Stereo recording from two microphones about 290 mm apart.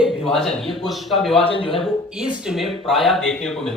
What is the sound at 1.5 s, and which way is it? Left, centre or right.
Speech, centre.